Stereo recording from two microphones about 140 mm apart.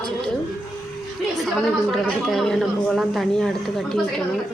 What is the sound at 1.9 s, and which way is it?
Speech, centre (ahead or behind).